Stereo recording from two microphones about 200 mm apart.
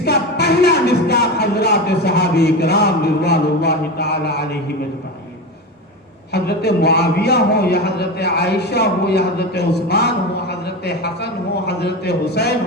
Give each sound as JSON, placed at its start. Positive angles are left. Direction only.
{"t": 0.0, "sound": "music", "side_deg": 55}
{"t": 6.3, "sound": "a man's voice", "side_deg": 55}